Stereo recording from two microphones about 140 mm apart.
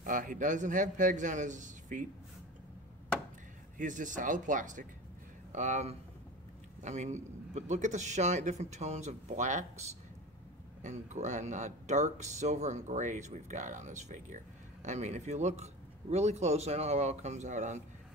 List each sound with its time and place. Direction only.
0.0 s speech: 70° right (ahead or behind)
3.7 s speech: 65° right (ahead or behind)